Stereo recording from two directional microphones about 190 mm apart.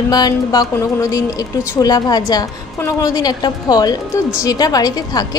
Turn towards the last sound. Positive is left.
turn(degrees=20)  # may be behind; listen again after turning